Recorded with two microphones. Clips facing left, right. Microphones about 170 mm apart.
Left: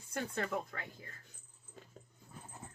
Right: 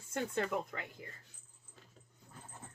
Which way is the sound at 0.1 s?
20° right (ahead or behind).